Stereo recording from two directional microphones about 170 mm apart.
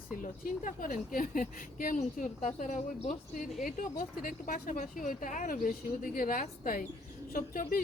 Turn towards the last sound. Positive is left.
turn(degrees=55)  # may be behind; listen again after turning